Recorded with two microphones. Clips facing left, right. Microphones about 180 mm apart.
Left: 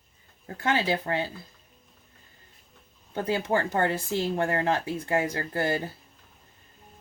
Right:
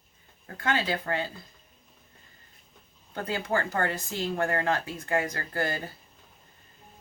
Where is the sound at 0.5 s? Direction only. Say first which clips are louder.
Left 3 dB; 25° left (ahead or behind).